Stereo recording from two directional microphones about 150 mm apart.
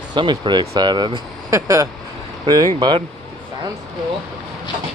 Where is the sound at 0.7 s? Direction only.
30° right (ahead or behind).